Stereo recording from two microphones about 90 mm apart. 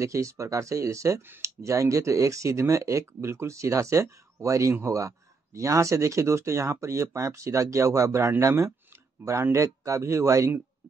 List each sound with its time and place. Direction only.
0.0 s speech: 35° right (ahead or behind)